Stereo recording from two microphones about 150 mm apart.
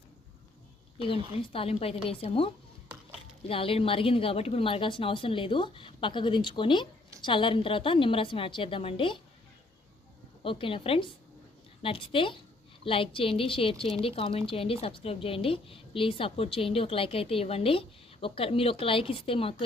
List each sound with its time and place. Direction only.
1.4 s a woman's voice: 40° left (ahead or behind)
3.5 s a woman's voice: 40° left (ahead or behind)
10.4 s a woman's voice: 35° left (ahead or behind)